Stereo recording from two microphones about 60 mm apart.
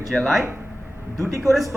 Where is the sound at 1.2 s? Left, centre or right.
Right.